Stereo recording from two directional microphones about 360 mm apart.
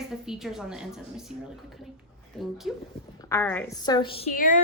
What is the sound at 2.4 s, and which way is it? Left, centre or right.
A woman's voice, centre.